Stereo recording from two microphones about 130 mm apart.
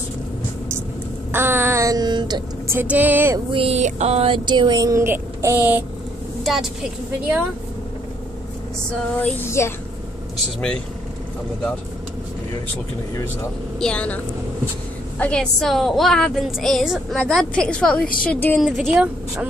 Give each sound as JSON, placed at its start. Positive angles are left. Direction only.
{"t": 1.3, "sound": "a sound", "side_deg": -20}
{"t": 2.7, "sound": "a woman's voice", "side_deg": -15}
{"t": 3.5, "sound": "speech", "side_deg": -50}
{"t": 6.4, "sound": "a woman's voice", "side_deg": -5}
{"t": 9.6, "sound": "a child's voice", "side_deg": 20}
{"t": 13.7, "sound": "a woman's voice", "side_deg": 10}
{"t": 18.0, "sound": "a woman's voice", "side_deg": 90}
{"t": 18.3, "sound": "a woman's voice", "side_deg": 15}
{"t": 18.6, "sound": "a woman's voice", "side_deg": 0}